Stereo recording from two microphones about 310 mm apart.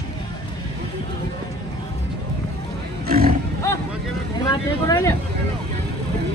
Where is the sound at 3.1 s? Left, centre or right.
Right.